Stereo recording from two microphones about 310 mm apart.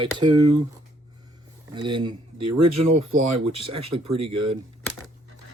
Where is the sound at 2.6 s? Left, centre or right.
Right.